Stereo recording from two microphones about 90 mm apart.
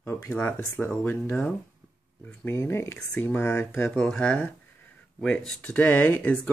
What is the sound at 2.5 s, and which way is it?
Speech, 30° left (ahead or behind).